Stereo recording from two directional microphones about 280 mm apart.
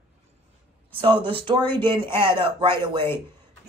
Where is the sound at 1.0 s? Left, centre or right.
Centre.